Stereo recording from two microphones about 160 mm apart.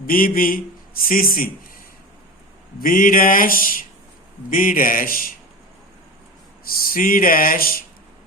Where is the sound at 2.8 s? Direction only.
60° left (ahead or behind).